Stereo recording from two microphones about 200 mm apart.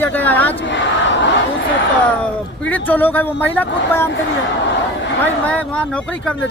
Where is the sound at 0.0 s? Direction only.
10° left (ahead or behind).